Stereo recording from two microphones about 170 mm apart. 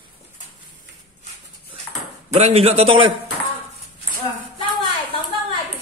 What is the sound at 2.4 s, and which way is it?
Speech, 35° right (ahead or behind).